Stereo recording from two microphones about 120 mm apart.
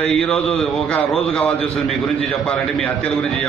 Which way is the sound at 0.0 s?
10° left (ahead or behind).